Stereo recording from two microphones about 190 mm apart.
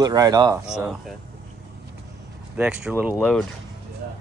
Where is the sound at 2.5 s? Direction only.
5° right (ahead or behind).